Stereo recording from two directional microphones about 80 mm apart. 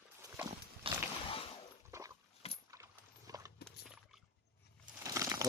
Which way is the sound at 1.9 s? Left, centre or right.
Right.